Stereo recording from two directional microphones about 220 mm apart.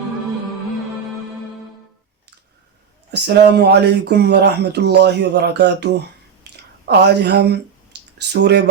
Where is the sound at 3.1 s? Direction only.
50° right (ahead or behind).